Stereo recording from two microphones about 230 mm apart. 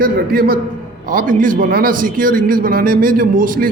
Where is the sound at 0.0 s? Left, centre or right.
Right.